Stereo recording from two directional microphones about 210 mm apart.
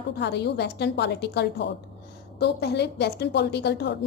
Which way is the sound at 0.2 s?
50° left (ahead or behind).